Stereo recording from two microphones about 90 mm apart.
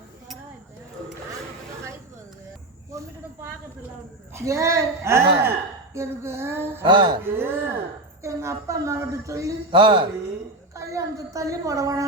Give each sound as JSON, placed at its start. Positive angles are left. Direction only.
{"t": 4.4, "sound": "a woman's voice", "side_deg": -35}
{"t": 6.8, "sound": "speech", "side_deg": -60}
{"t": 7.2, "sound": "a woman's voice", "side_deg": -25}
{"t": 9.7, "sound": "speech", "side_deg": -65}
{"t": 10.8, "sound": "a sound", "side_deg": -35}